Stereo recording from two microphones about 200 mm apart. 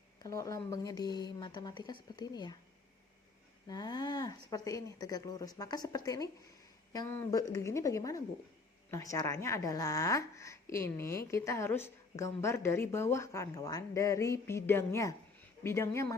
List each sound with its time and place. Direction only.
0.2 s speech: 15° left (ahead or behind)
3.7 s a woman's voice: 20° left (ahead or behind)